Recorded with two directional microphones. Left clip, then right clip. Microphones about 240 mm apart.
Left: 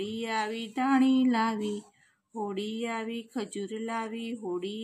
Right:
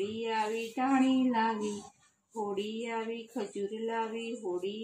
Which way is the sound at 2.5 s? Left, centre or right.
Left.